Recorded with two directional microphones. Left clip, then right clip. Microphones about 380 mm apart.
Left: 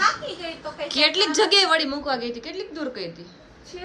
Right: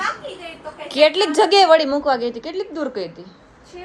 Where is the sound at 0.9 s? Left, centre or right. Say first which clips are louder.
Right 5 dB; centre.